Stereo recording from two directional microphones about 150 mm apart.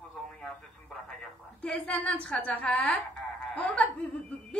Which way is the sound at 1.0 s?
5° left (ahead or behind).